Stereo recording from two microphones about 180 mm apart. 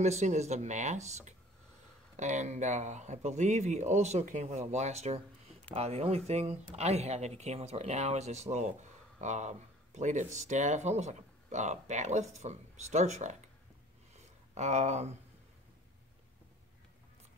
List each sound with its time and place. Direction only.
0.0 s speech: 40° right (ahead or behind)
14.5 s speech: 40° right (ahead or behind)